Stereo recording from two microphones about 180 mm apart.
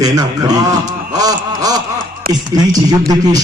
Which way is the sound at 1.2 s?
20° right (ahead or behind).